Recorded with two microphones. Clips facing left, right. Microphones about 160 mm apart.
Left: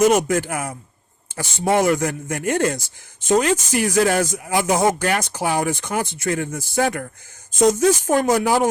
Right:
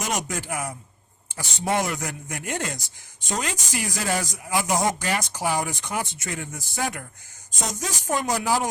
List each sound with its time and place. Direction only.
0.0 s speech: 55° left (ahead or behind)